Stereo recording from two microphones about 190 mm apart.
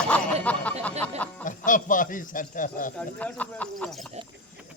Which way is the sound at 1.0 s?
5° left (ahead or behind).